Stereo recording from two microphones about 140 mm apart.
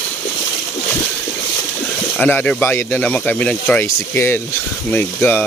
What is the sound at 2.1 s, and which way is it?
Speech, 10° left (ahead or behind).